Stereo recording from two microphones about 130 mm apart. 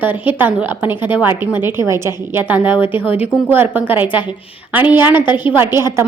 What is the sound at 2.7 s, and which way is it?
Speech, 40° left (ahead or behind).